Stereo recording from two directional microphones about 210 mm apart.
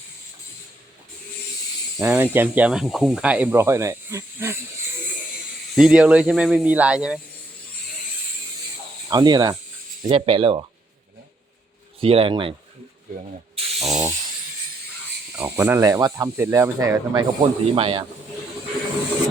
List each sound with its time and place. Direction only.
2.0 s speech: 10° right (ahead or behind)
5.7 s speech: 5° right (ahead or behind)
9.0 s speech: 20° right (ahead or behind)
11.9 s speech: 25° right (ahead or behind)
13.7 s a sound: centre (ahead or behind)
15.3 s speech: 10° right (ahead or behind); by 18.0 s 25° right (ahead or behind)